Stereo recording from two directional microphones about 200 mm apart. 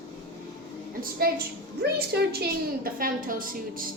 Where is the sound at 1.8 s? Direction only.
50° right (ahead or behind).